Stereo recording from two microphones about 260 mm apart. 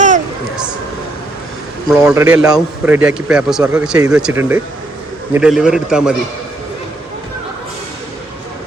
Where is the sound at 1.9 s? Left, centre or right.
Centre.